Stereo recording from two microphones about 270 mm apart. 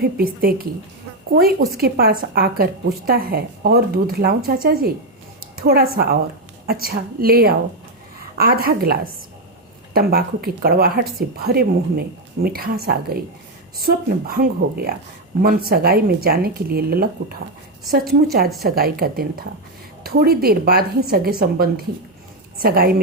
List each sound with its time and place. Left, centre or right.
0.0 s a woman's voice: right